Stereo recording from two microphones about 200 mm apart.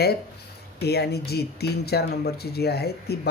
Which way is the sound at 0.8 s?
55° left (ahead or behind).